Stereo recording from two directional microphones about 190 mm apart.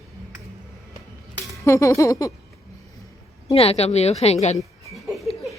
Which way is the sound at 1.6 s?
15° left (ahead or behind).